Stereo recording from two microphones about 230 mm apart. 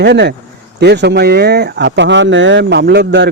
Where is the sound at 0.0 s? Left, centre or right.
Right.